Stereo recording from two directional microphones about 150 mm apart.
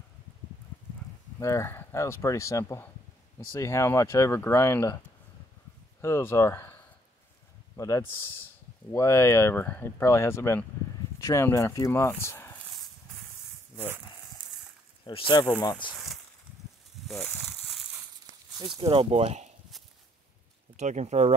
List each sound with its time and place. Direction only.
1.4 s speech: 20° left (ahead or behind)
5.9 s speech: 15° left (ahead or behind)
15.0 s speech: 30° left (ahead or behind)
17.1 s a sound: centre (ahead or behind)
18.6 s speech: 35° right (ahead or behind)
20.7 s speech: 50° right (ahead or behind)